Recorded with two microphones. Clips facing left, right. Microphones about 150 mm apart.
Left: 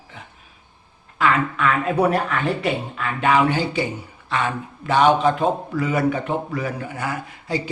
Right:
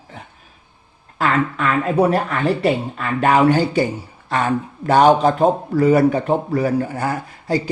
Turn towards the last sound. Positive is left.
turn(degrees=-40)  # may be behind; listen again after turning